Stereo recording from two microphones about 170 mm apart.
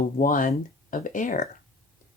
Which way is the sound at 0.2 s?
50° left (ahead or behind).